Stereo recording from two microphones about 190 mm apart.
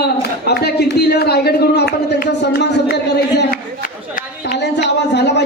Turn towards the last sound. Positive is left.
turn(degrees=65)  # may be behind; listen again after turning